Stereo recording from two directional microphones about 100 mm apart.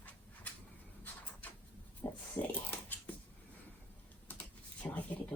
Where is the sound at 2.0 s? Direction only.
20° left (ahead or behind).